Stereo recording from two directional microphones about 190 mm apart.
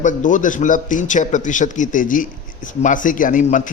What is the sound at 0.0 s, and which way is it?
A man's voice, 40° left (ahead or behind).